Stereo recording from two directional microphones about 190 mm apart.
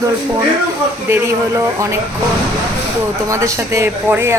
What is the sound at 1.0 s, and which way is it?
Speech, 15° right (ahead or behind).